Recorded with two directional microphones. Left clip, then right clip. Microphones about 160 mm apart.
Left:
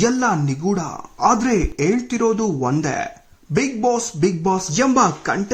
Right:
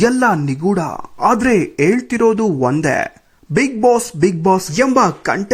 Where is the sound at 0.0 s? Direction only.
40° right (ahead or behind).